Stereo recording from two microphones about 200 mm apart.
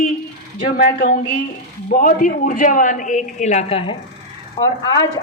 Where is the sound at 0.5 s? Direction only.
45° left (ahead or behind).